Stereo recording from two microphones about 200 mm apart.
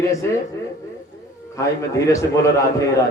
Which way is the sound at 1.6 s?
15° left (ahead or behind).